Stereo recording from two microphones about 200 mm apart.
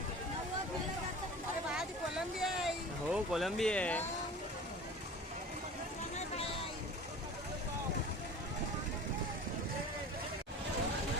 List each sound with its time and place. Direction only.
1.7 s vehicle: centre (ahead or behind)